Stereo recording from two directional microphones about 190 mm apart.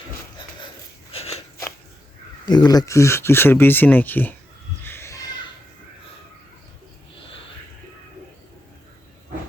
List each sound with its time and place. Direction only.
1.1 s crunch: 30° left (ahead or behind)
2.5 s speech: 20° left (ahead or behind)
4.8 s a sound: 10° left (ahead or behind)